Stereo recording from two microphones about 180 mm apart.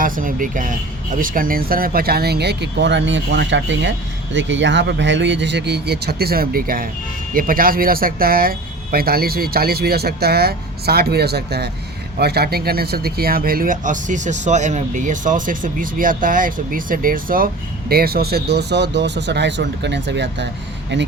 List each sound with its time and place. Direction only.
0.0 s speech: 50° right (ahead or behind); by 20.5 s 75° right (ahead or behind)